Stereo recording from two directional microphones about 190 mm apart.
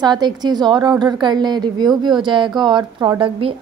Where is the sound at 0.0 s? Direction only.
20° right (ahead or behind).